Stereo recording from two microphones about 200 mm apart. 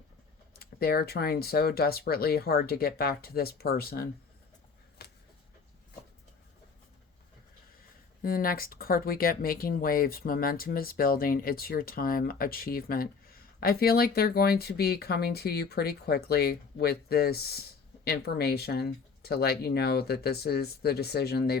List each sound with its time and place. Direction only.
0.6 s speech: 50° left (ahead or behind)
8.2 s speech: 45° left (ahead or behind)